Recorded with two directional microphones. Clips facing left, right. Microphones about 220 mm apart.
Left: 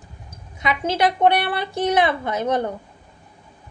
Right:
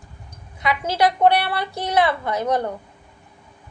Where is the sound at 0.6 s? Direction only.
20° left (ahead or behind).